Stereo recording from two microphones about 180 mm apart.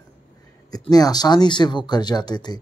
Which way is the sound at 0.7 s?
20° left (ahead or behind).